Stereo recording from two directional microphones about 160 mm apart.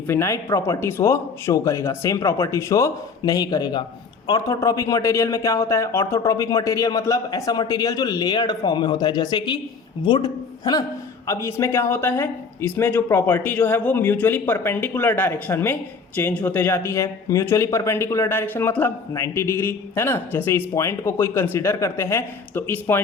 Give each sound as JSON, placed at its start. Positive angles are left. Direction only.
{"t": 0.1, "sound": "a man's voice", "side_deg": 20}